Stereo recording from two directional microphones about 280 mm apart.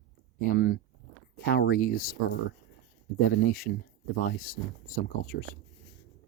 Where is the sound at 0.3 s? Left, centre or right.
Left.